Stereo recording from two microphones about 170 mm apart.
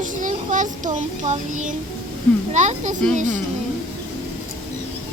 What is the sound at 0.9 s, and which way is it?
Speech, 50° right (ahead or behind).